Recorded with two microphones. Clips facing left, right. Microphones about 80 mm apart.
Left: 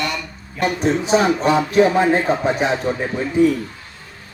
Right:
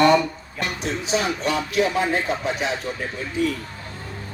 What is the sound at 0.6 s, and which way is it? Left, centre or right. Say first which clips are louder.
Speech: left 8 dB; left.